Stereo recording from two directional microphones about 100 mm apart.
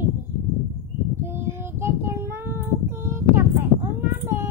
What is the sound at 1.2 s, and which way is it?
Child singing, 25° right (ahead or behind).